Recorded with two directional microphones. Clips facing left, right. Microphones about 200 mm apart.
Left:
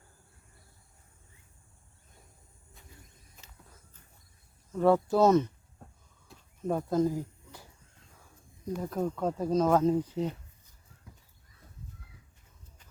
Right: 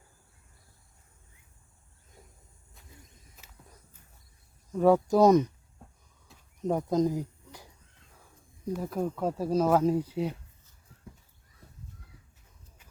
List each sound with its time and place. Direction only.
4.7 s speech: 10° right (ahead or behind)
6.6 s speech: 15° right (ahead or behind)